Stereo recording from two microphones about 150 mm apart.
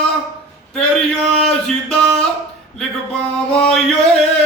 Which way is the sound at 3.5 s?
5° left (ahead or behind).